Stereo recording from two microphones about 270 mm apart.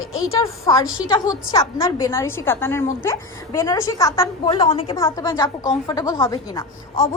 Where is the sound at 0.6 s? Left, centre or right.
Centre.